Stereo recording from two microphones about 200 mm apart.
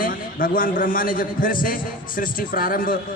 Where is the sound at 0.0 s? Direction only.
45° left (ahead or behind).